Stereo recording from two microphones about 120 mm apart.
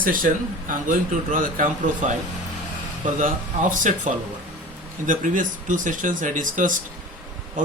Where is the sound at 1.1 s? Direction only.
90° right.